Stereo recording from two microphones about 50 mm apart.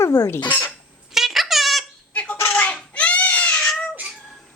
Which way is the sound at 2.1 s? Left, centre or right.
Left.